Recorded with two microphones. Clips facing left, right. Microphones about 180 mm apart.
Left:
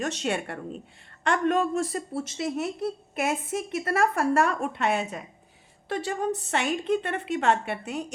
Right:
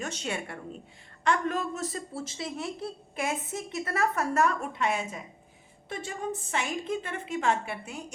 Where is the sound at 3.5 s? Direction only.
65° left (ahead or behind).